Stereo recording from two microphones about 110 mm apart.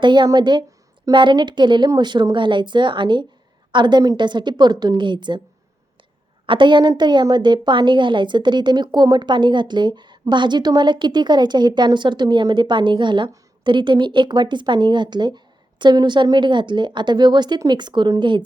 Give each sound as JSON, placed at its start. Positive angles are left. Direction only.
{"t": 0.0, "sound": "a woman's voice", "side_deg": -45}
{"t": 6.4, "sound": "a woman's voice", "side_deg": -50}